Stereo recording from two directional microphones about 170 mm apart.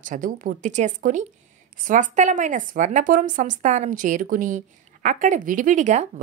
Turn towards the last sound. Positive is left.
turn(degrees=-45)  # may be behind; listen again after turning